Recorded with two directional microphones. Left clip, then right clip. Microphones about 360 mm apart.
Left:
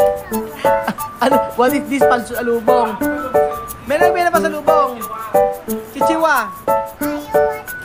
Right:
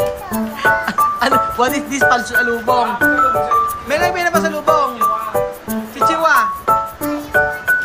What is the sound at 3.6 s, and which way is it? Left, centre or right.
Music, centre.